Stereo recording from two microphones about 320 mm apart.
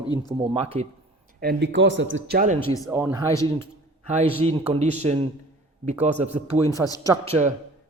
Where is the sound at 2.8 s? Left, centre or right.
Centre.